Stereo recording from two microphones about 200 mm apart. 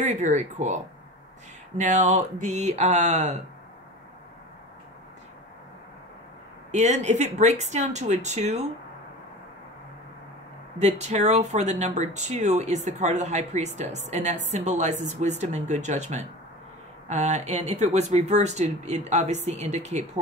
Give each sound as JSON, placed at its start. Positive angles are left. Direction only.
{"t": 0.0, "sound": "speech", "side_deg": -35}
{"t": 1.8, "sound": "speech", "side_deg": -35}
{"t": 6.7, "sound": "speech", "side_deg": -35}
{"t": 10.8, "sound": "speech", "side_deg": -35}